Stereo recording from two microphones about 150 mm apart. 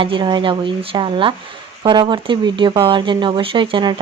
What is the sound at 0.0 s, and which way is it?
Speech, 35° right (ahead or behind).